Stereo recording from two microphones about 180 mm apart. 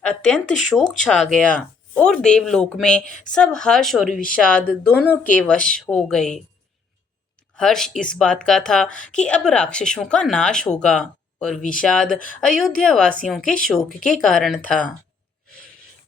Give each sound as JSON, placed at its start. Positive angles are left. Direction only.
{"t": 0.0, "sound": "speech", "side_deg": 5}
{"t": 3.1, "sound": "speech", "side_deg": 45}
{"t": 3.3, "sound": "speech", "side_deg": 5}
{"t": 7.5, "sound": "speech", "side_deg": 5}